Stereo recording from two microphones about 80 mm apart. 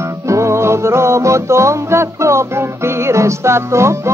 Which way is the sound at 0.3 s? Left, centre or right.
Right.